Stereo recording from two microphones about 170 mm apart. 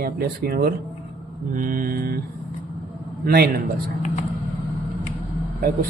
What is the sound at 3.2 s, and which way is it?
Speech, 65° right (ahead or behind).